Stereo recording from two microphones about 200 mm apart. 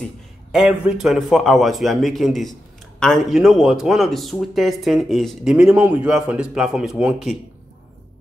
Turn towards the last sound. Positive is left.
turn(degrees=-5)  # may be behind; listen again after turning